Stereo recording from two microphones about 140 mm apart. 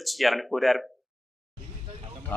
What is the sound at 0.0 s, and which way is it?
Speech, centre (ahead or behind).